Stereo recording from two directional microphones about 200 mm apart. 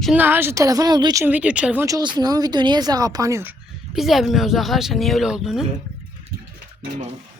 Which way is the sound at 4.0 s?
Centre (ahead or behind).